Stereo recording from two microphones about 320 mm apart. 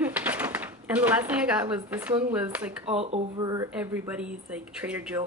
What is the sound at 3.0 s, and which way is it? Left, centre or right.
Speech, centre.